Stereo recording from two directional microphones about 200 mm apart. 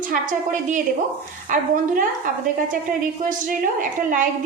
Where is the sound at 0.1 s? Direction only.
40° right (ahead or behind).